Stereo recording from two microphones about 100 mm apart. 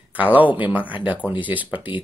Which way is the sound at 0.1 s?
15° right (ahead or behind).